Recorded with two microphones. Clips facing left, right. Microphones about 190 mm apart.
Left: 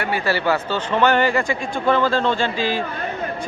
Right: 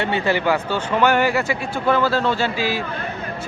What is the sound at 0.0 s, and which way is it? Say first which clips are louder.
Speech: right 1 dB; 20° right (ahead or behind).